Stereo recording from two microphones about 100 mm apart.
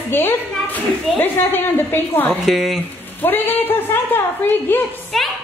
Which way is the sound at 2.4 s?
5° right (ahead or behind).